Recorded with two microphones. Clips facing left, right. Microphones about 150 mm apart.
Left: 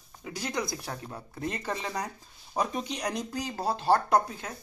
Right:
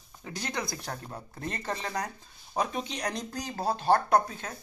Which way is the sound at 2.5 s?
Centre (ahead or behind).